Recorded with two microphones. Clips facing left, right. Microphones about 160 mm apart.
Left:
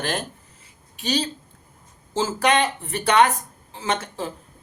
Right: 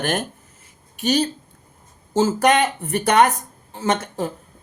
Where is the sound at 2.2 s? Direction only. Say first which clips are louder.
Right 4 dB; 45° right (ahead or behind).